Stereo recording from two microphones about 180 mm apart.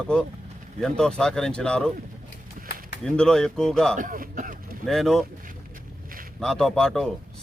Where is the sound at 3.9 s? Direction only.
50° right (ahead or behind).